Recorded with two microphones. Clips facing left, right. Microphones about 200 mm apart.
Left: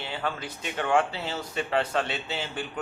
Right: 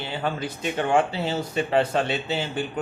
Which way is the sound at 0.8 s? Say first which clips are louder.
Right 3 dB; 25° right (ahead or behind).